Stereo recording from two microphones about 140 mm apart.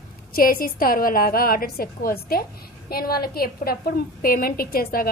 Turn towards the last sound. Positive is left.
turn(degrees=90)